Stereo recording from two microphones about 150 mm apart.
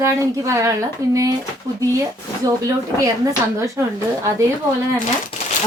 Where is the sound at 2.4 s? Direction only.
20° right (ahead or behind).